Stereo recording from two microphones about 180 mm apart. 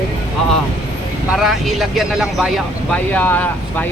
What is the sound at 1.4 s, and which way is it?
Speech, centre (ahead or behind).